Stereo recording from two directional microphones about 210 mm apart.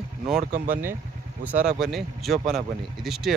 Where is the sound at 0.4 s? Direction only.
40° right (ahead or behind).